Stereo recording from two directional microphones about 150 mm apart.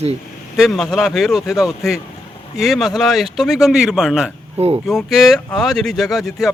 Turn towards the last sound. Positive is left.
turn(degrees=0)  # may be behind; listen again after turning